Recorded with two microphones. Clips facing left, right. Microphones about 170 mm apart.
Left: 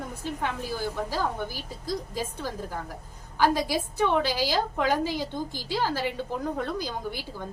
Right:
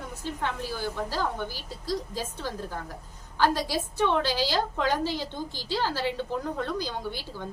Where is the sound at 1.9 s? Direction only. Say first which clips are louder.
Even; 10° left (ahead or behind).